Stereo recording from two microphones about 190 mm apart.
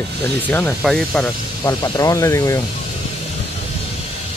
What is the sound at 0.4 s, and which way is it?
Speech, 10° left (ahead or behind).